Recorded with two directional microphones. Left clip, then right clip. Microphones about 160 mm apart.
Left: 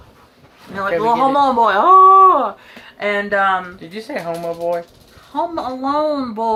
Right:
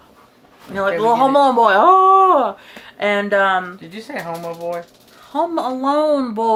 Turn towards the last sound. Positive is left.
turn(degrees=-30)  # may be behind; listen again after turning